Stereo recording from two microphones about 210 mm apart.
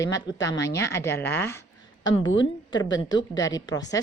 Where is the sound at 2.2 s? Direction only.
65° left (ahead or behind).